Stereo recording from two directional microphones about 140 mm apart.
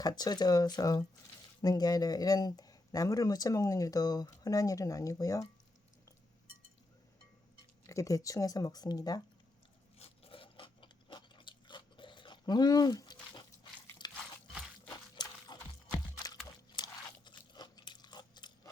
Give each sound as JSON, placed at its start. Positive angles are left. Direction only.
{"t": 0.0, "sound": "speech", "side_deg": 30}
{"t": 7.9, "sound": "speech", "side_deg": 25}
{"t": 10.0, "sound": "scrape", "side_deg": 40}
{"t": 14.0, "sound": "a sound", "side_deg": 30}
{"t": 16.6, "sound": "crunch", "side_deg": 30}